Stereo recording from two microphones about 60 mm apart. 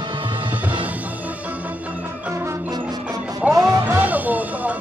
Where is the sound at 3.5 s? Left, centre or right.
Right.